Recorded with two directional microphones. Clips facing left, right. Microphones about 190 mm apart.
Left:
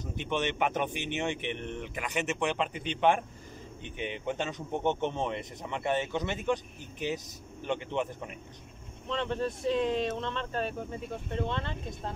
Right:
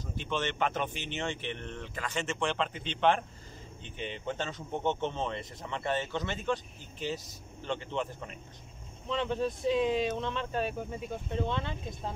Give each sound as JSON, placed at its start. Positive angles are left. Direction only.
{"t": 0.0, "sound": "speech", "side_deg": 20}
{"t": 9.1, "sound": "speech", "side_deg": 0}